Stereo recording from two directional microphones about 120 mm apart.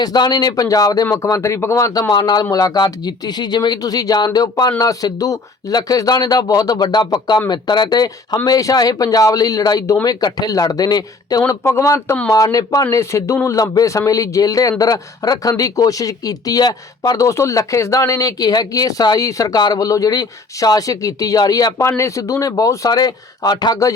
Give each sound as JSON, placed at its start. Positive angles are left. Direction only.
{"t": 0.0, "sound": "a man's voice", "side_deg": 35}
{"t": 11.9, "sound": "speech", "side_deg": 15}
{"t": 12.3, "sound": "a man's voice", "side_deg": 30}